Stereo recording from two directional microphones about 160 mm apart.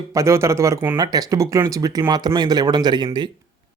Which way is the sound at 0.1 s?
20° right (ahead or behind).